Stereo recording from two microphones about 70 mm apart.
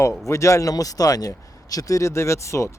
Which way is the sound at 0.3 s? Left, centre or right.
Left.